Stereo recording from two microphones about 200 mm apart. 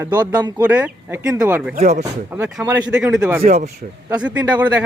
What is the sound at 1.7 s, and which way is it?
Speech, 35° right (ahead or behind).